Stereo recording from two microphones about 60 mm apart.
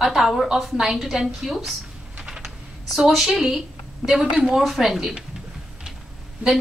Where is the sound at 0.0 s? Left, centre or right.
Centre.